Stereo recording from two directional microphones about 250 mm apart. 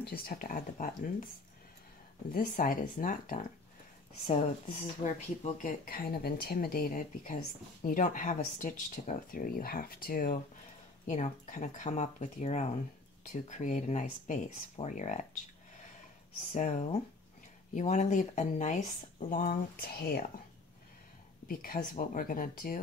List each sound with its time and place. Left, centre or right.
0.0 s speech: left
2.3 s speech: left
16.5 s speech: left
21.5 s speech: left